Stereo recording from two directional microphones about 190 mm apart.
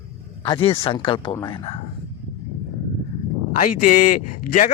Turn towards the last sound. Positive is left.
turn(degrees=40)  # may be behind; listen again after turning